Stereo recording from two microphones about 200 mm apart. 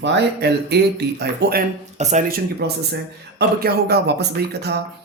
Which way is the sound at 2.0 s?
35° right (ahead or behind).